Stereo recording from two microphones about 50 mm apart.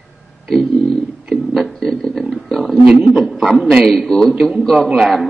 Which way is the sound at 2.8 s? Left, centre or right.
Centre.